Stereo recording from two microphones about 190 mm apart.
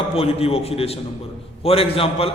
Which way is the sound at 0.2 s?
30° left (ahead or behind).